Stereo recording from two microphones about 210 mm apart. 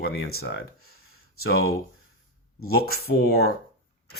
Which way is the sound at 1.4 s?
50° left (ahead or behind).